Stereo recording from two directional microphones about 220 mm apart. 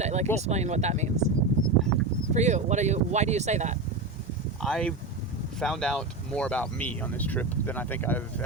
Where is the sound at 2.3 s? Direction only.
30° right (ahead or behind).